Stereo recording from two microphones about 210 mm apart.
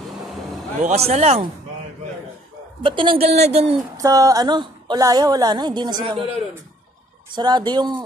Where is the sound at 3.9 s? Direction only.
15° right (ahead or behind).